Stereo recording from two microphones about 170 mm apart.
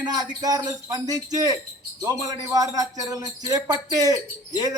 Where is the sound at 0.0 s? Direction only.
25° right (ahead or behind).